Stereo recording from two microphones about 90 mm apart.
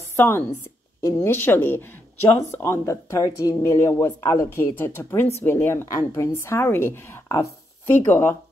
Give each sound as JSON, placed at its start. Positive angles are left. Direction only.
{"t": 0.1, "sound": "a sound", "side_deg": 30}
{"t": 1.0, "sound": "a woman's voice", "side_deg": 35}
{"t": 1.3, "sound": "a woman's voice", "side_deg": 25}